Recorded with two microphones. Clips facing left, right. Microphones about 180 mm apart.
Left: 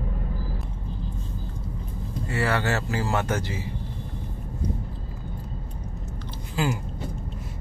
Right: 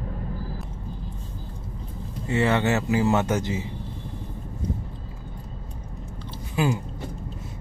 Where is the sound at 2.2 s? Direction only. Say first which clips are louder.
Right 4 dB; 20° right (ahead or behind).